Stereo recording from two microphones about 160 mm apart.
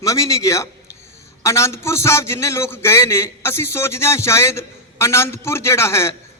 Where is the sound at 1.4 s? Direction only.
20° left (ahead or behind).